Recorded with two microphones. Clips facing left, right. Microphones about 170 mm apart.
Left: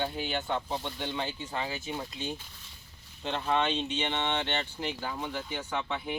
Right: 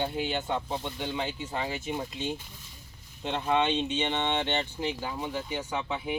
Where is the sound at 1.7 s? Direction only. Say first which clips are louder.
Right 3 dB; 25° right (ahead or behind).